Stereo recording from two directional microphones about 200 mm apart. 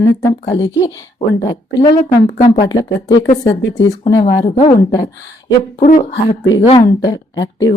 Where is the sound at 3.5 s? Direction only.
65° left (ahead or behind).